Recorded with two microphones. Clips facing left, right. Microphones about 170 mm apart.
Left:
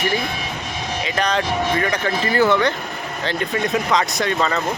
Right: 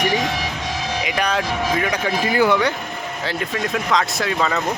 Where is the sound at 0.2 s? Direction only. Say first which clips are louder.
Right 3 dB; 80° right.